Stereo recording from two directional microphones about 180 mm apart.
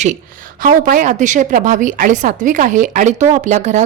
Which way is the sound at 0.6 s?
50° right (ahead or behind).